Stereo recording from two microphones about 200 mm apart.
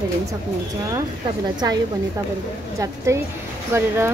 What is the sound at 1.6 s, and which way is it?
A woman's voice, 20° right (ahead or behind).